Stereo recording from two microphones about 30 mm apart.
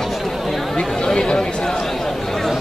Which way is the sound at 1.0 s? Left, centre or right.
Left.